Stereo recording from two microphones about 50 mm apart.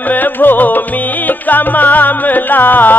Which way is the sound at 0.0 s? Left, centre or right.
Left.